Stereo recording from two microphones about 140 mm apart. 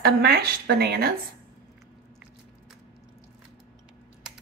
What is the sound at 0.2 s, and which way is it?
Speech, 90° right.